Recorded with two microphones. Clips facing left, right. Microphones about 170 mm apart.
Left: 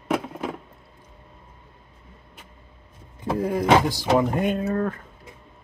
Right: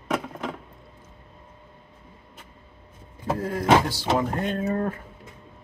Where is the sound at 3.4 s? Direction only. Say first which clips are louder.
Left 2 dB; 15° left (ahead or behind).